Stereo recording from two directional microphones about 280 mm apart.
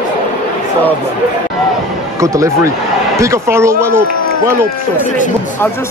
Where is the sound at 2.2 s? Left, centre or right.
Centre.